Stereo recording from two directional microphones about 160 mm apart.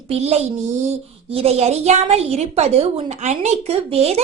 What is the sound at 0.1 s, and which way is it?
A woman's voice, 40° right (ahead or behind).